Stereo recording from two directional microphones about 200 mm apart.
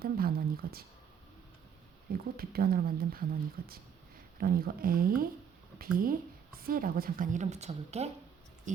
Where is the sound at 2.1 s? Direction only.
50° right (ahead or behind).